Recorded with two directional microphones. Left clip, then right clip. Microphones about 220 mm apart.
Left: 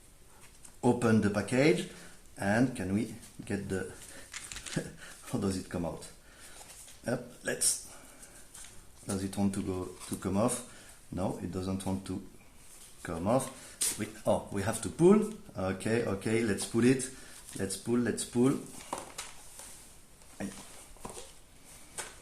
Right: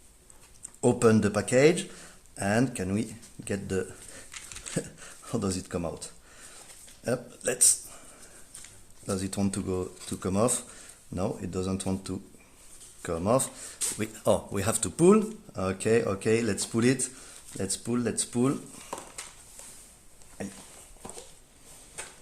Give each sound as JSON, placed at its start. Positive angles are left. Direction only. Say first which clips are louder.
{"t": 0.8, "sound": "speech", "louder": "right 5 dB", "side_deg": -45}
{"t": 4.7, "sound": "speech", "louder": "right 5 dB", "side_deg": -45}
{"t": 7.0, "sound": "speech", "louder": "right 5 dB", "side_deg": -45}
{"t": 9.0, "sound": "speech", "louder": "right 3 dB", "side_deg": -45}